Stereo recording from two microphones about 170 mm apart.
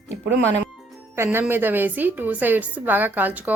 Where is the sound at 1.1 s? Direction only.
15° right (ahead or behind).